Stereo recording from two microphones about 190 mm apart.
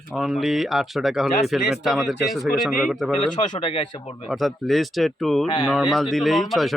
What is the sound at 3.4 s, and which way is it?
Speech, 25° left (ahead or behind).